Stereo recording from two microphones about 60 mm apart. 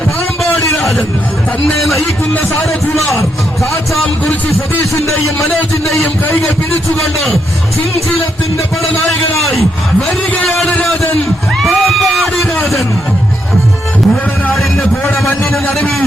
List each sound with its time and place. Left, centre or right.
0.7 s hubbub: centre
4.4 s speech: left
5.7 s a man's voice: left
9.4 s speech: centre
11.6 s speech: centre